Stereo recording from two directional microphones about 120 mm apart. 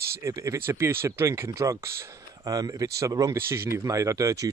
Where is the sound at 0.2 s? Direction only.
25° right (ahead or behind).